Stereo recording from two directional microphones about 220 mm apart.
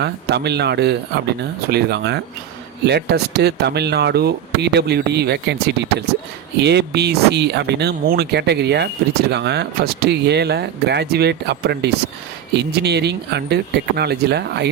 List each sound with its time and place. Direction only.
0.0 s speech: 50° right (ahead or behind)